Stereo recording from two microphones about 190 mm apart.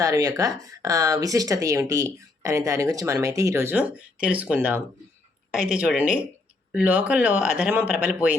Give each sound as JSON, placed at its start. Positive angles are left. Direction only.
{"t": 0.0, "sound": "speech", "side_deg": -20}